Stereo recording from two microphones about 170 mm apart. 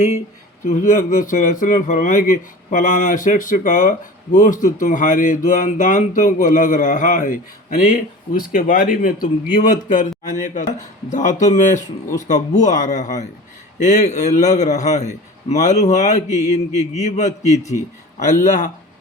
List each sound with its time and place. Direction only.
0.7 s speech: 50° left (ahead or behind)